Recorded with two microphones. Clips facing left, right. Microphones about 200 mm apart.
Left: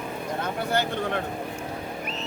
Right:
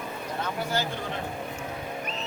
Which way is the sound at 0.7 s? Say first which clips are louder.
Left 7 dB; 60° left (ahead or behind).